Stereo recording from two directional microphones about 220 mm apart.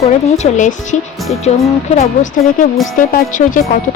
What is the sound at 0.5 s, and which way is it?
Speech, 35° left (ahead or behind).